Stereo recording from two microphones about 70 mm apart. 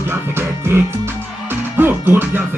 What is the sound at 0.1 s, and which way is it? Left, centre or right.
Music, right.